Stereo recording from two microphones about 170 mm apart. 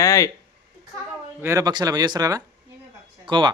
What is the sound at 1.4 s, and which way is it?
Speech, 20° right (ahead or behind).